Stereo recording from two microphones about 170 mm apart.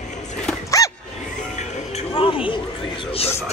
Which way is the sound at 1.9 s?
35° left (ahead or behind).